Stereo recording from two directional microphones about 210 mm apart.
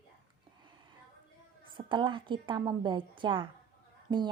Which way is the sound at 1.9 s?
25° right (ahead or behind).